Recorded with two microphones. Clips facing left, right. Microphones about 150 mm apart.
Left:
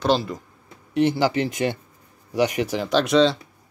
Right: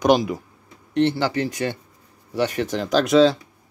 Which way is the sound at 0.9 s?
10° left (ahead or behind).